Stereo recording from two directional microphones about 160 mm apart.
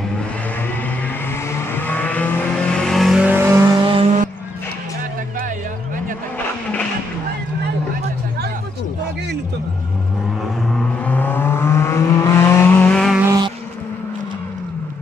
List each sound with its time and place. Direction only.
1.5 s vehicle: 10° left (ahead or behind); by 3.6 s 15° right (ahead or behind)
3.6 s vehicle: 30° right (ahead or behind)
10.7 s vehicle: 10° left (ahead or behind)